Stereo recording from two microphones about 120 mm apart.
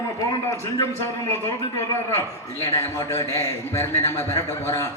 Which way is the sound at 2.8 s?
25° left (ahead or behind).